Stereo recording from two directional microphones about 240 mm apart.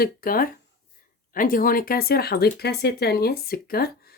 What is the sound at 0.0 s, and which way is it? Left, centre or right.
Speech, left.